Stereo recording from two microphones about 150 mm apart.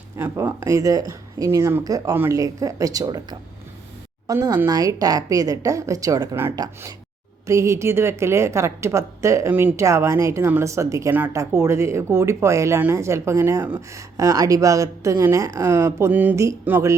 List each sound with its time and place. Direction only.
0.2 s a woman's voice: 15° right (ahead or behind)